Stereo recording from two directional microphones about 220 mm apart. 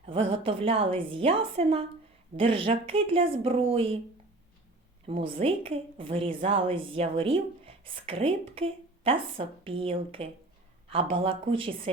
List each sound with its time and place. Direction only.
0.0 s a woman's voice: 25° right (ahead or behind)
5.0 s a woman's voice: 25° right (ahead or behind)